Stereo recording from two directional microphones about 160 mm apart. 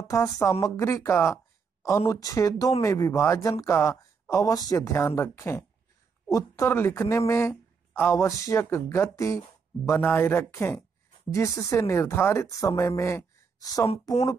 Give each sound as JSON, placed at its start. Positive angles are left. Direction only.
{"t": 0.1, "sound": "speech", "side_deg": 20}